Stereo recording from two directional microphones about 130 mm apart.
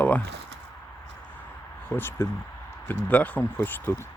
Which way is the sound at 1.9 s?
15° left (ahead or behind).